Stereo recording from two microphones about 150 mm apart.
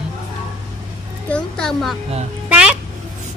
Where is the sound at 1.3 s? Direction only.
5° left (ahead or behind).